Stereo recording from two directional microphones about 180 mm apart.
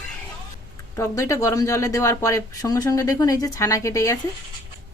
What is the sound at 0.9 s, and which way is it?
A woman's voice, 15° left (ahead or behind).